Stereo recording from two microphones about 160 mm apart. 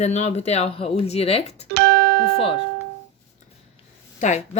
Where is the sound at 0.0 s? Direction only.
45° left (ahead or behind).